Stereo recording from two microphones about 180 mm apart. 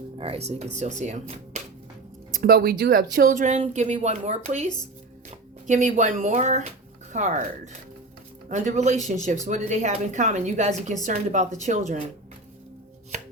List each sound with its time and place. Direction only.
0.2 s speech: 35° right (ahead or behind)
2.3 s speech: 55° right (ahead or behind)
8.4 s speech: 40° right (ahead or behind)